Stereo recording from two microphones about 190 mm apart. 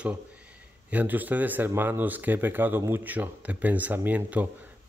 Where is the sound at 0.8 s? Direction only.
10° right (ahead or behind).